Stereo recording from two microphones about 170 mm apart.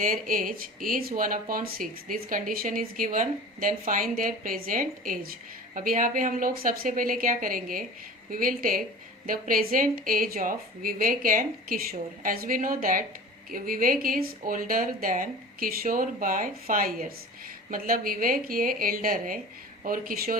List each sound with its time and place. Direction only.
0.0 s a woman's voice: 50° right (ahead or behind)